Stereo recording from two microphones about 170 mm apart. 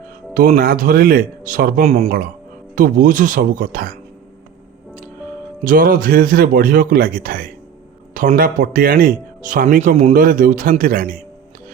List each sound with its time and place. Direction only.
0.3 s a man's voice: 55° right (ahead or behind)
1.8 s speech: 40° right (ahead or behind)
2.7 s speech: 55° right (ahead or behind)
5.6 s a man's voice: 55° right (ahead or behind)